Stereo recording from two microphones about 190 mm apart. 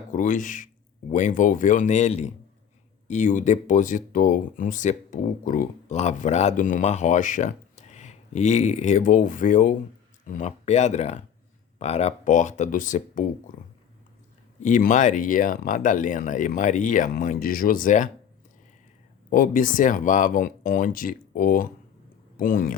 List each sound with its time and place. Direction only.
0.1 s speech: 45° left (ahead or behind)
14.6 s speech: 45° left (ahead or behind)
19.3 s speech: 45° left (ahead or behind)